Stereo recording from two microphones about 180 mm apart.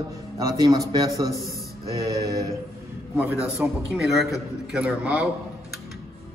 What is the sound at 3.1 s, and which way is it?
A man's voice, 10° right (ahead or behind).